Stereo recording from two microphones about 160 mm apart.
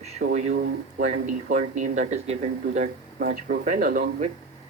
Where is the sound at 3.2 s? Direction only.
70° right (ahead or behind).